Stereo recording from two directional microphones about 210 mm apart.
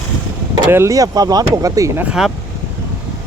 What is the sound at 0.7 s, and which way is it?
Speech, 15° right (ahead or behind).